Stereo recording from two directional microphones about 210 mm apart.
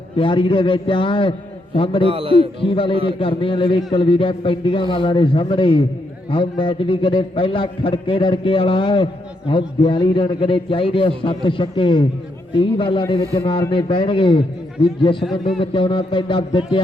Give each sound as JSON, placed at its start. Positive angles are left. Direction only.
{"t": 0.2, "sound": "a man's voice", "side_deg": 25}
{"t": 2.0, "sound": "a man's voice", "side_deg": -25}
{"t": 2.6, "sound": "a man's voice", "side_deg": 25}